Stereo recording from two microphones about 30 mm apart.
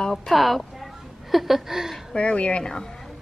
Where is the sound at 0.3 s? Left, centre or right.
Centre.